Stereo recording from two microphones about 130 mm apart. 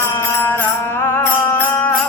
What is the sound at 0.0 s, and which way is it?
Music, 20° left (ahead or behind).